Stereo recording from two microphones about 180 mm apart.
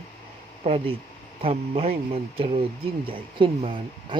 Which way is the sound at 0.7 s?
35° right (ahead or behind).